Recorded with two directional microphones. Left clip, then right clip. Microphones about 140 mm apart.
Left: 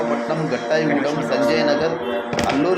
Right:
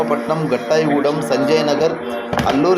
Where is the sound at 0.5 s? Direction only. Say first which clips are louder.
Right 4 dB; 35° right (ahead or behind).